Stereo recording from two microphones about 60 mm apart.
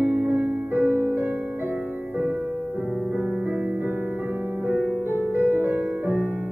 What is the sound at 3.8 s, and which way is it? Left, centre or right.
Music, right.